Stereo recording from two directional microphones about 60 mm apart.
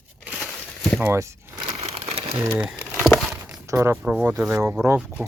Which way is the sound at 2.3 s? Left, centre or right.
Right.